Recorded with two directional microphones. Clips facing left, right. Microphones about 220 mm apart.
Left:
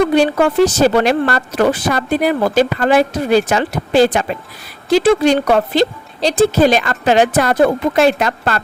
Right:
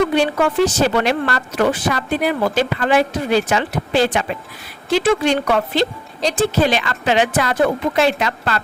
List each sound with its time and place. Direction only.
0.1 s a woman's voice: 40° left (ahead or behind)